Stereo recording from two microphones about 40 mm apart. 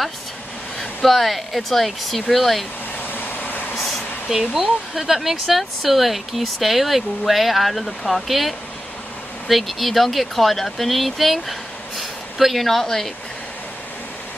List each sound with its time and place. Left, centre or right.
0.7 s speech: centre
3.1 s a sound: left
4.3 s speech: centre